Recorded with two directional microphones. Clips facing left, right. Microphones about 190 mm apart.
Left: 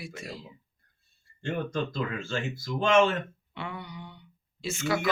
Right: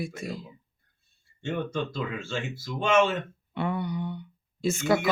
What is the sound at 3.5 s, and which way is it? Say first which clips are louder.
Speech: right 11 dB; 50° right (ahead or behind).